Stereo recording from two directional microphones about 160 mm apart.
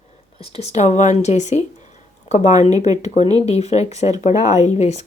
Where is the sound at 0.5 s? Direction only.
45° left (ahead or behind).